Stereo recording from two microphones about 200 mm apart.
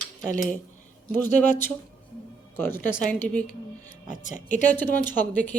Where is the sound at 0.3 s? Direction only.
40° left (ahead or behind).